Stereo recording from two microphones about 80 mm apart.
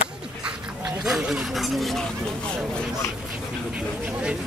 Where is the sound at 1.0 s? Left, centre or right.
Centre.